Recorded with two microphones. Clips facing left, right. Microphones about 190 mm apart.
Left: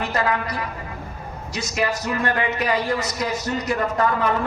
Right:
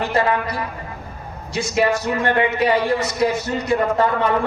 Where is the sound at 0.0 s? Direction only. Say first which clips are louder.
Right 4 dB; 30° right (ahead or behind).